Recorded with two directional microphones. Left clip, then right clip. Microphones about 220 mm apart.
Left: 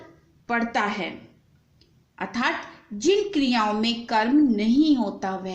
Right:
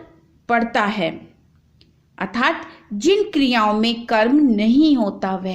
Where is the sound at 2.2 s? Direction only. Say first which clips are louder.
Right 6 dB; 45° right (ahead or behind).